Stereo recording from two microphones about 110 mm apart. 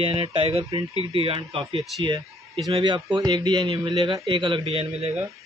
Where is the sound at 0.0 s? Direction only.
55° right (ahead or behind).